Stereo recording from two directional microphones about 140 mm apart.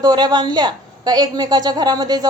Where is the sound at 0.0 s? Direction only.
30° right (ahead or behind).